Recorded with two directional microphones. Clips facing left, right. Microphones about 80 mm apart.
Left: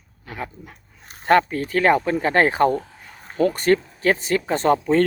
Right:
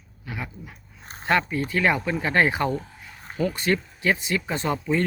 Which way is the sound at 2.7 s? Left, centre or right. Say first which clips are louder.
Left 4 dB; left.